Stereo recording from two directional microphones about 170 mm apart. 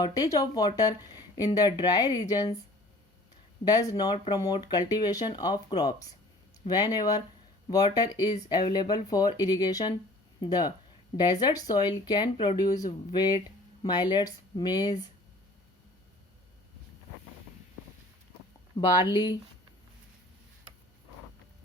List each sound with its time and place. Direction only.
0.0 s speech: 20° left (ahead or behind)
3.6 s speech: 20° left (ahead or behind)
18.8 s speech: 25° left (ahead or behind)